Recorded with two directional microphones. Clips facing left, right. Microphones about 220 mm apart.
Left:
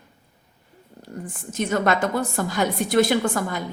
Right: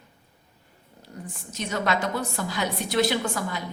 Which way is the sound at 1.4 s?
50° left (ahead or behind).